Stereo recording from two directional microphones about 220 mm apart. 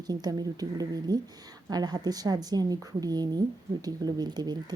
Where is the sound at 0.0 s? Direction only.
15° right (ahead or behind).